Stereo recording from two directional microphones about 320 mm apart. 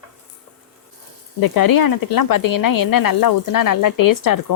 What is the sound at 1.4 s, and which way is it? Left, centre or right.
Speech, left.